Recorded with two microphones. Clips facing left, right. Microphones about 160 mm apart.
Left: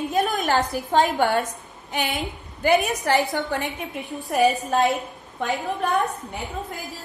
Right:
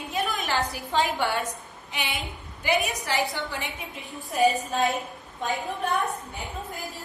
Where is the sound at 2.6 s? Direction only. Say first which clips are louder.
Left 6 dB; 50° left (ahead or behind).